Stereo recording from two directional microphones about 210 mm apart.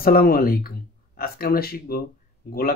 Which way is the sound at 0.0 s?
45° left (ahead or behind).